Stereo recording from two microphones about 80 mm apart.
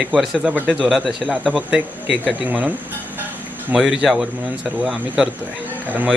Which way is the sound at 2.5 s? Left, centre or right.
Centre.